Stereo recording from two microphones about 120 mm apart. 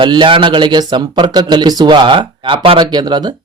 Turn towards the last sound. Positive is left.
turn(degrees=-40)  # may be behind; listen again after turning